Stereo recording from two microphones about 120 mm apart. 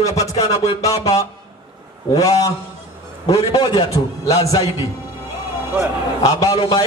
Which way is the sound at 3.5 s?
45° left (ahead or behind).